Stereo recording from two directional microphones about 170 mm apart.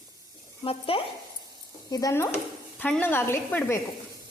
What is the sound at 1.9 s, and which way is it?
A woman's voice, 20° left (ahead or behind).